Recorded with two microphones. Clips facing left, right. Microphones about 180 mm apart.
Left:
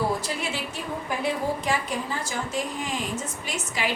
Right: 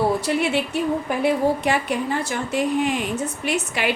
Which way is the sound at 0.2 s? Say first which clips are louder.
Right 9 dB; 65° right (ahead or behind).